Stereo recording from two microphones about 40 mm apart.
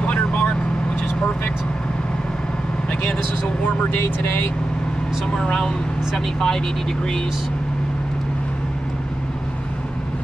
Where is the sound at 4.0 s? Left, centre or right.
Left.